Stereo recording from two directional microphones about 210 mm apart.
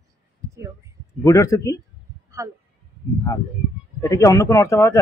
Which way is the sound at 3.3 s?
15° left (ahead or behind).